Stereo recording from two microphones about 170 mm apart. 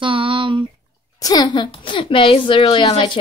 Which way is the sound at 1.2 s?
25° left (ahead or behind).